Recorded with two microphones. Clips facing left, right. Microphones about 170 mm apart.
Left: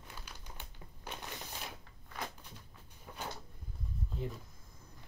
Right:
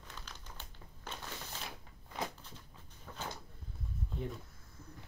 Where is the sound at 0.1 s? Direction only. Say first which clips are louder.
Even; 10° left (ahead or behind).